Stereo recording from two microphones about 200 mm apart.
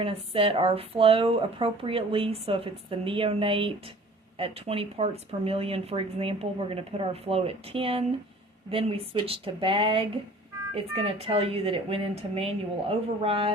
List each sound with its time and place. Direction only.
0.0 s speech: 30° right (ahead or behind)